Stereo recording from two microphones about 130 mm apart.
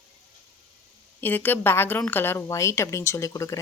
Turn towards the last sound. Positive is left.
turn(degrees=25)  # may be behind; listen again after turning